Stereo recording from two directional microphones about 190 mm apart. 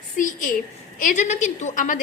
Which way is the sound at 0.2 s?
45° left (ahead or behind).